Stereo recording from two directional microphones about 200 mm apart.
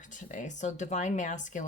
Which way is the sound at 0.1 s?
40° left (ahead or behind).